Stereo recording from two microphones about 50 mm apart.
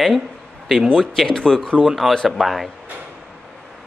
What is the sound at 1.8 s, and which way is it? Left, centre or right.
Speech, centre.